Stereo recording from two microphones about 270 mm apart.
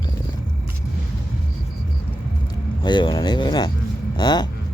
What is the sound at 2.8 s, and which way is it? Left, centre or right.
Speech, centre.